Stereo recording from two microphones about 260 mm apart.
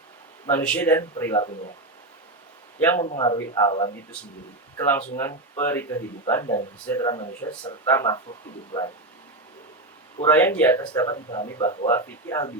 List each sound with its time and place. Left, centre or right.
0.4 s speech: centre
3.0 s speech: centre
10.2 s speech: centre